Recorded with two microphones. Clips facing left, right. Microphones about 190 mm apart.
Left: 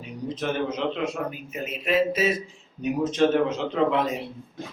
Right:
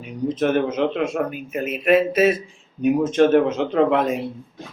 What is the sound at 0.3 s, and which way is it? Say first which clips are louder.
A man's voice: right 7 dB; 55° right (ahead or behind).